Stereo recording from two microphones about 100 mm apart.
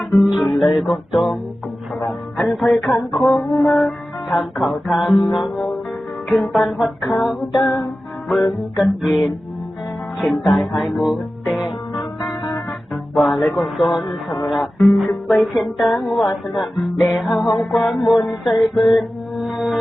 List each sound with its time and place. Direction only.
0.0 s speech: centre (ahead or behind)
0.8 s music: centre (ahead or behind)
2.0 s speech: centre (ahead or behind)
3.2 s music: centre (ahead or behind)
7.6 s music: 40° left (ahead or behind)
8.8 s music: centre (ahead or behind)
10.4 s music: centre (ahead or behind)
11.6 s music: 45° left (ahead or behind)
12.9 s music: centre (ahead or behind)